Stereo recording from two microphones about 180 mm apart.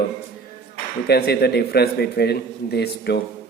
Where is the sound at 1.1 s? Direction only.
65° left (ahead or behind).